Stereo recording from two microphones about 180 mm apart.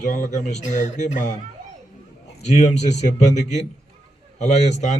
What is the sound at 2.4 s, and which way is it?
A man's voice, 40° left (ahead or behind).